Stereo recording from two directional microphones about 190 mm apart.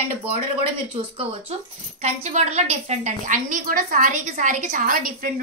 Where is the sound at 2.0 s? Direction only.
35° right (ahead or behind).